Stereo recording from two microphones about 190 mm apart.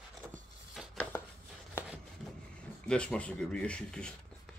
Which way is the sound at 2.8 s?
5° left (ahead or behind).